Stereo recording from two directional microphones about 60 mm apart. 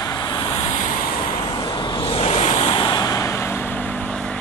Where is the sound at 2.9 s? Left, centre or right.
Left.